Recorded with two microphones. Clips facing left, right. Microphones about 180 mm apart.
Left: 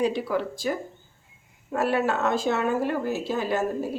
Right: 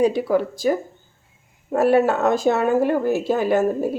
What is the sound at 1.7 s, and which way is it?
Speech, 45° right (ahead or behind).